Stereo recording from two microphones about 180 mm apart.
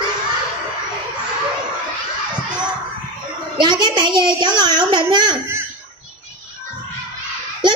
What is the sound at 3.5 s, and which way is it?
A child's voice, 25° right (ahead or behind).